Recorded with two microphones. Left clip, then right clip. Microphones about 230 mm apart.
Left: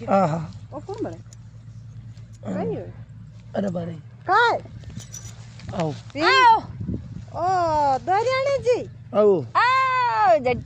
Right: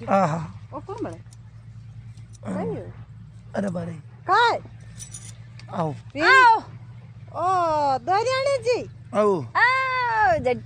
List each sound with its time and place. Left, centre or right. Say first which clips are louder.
0.0 s speech: left 1 dB; centre
0.7 s speech: left 2 dB; centre
2.4 s speech: left 2 dB; centre
4.3 s a child's voice: left 1 dB; centre
5.7 s speech: even; centre
6.1 s a child's voice: right 1 dB; centre
9.1 s speech: left 3 dB; centre
9.6 s speech: even; left